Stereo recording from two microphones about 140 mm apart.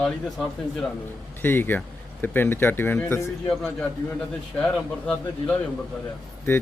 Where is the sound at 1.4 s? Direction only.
15° left (ahead or behind).